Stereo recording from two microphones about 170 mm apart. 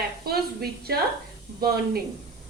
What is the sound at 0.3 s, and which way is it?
A woman's voice, 65° right (ahead or behind).